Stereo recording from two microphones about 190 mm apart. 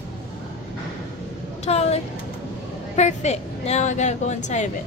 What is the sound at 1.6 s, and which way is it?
A woman's voice, 35° left (ahead or behind).